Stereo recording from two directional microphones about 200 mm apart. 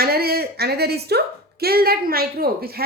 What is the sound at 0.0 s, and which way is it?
A woman's voice, 50° right (ahead or behind).